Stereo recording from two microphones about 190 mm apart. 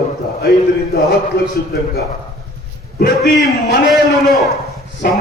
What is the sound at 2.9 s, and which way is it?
Speech, 50° left (ahead or behind).